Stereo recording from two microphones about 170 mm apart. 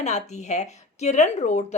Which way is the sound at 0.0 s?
40° left (ahead or behind).